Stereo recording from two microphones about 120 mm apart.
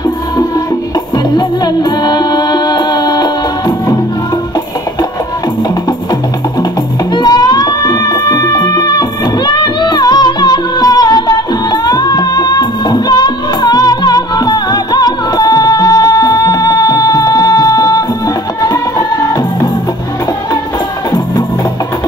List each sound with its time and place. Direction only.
1.3 s music: 35° left (ahead or behind)
7.2 s music: 35° left (ahead or behind)